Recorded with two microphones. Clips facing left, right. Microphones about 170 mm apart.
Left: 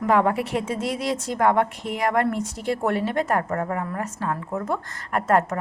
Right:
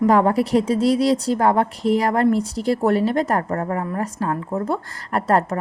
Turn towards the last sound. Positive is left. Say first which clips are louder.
# right 2 dB
turn(degrees=-35)  # may be behind; listen again after turning